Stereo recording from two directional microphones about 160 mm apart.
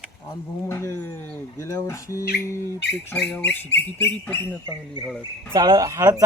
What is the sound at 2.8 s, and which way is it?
Bird, 90° left.